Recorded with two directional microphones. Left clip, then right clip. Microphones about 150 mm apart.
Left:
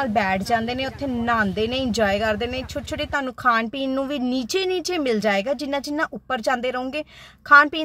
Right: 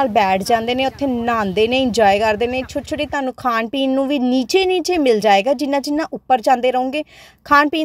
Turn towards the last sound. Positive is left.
turn(degrees=-35)  # may be behind; listen again after turning